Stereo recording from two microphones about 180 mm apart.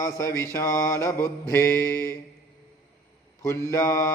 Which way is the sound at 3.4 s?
15° left (ahead or behind).